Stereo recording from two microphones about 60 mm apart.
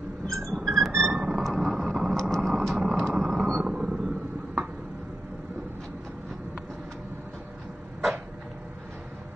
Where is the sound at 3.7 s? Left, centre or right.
Centre.